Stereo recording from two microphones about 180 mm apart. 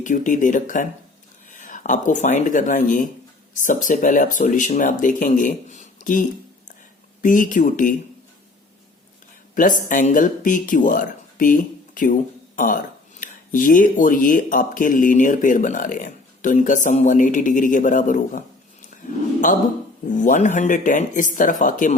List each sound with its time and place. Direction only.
0.0 s speech: 45° left (ahead or behind)
9.6 s speech: 45° left (ahead or behind)
20.1 s speech: 45° left (ahead or behind)